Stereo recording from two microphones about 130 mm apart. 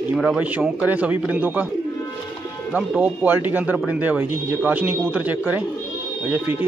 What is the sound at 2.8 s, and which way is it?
Speech, centre (ahead or behind).